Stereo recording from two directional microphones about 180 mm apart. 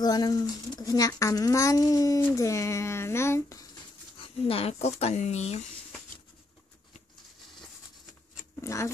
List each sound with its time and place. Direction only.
0.0 s speech: 20° left (ahead or behind)
4.2 s speech: 30° left (ahead or behind)
8.5 s speech: 15° left (ahead or behind)